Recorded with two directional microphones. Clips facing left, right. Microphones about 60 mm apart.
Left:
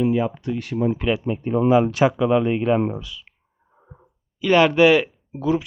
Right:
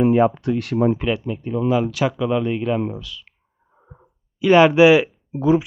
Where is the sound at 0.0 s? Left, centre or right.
Right.